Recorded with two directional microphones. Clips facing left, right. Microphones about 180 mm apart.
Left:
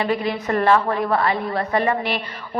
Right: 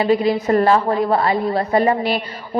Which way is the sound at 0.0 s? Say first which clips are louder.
Right 6 dB; 30° right (ahead or behind).